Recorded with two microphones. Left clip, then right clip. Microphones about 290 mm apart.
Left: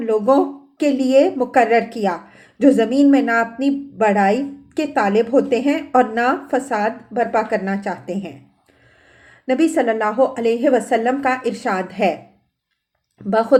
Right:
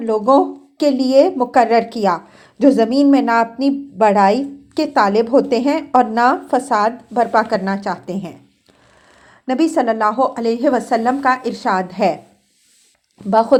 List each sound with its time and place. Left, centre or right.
0.0 s a woman's voice: centre
13.3 s a woman's voice: centre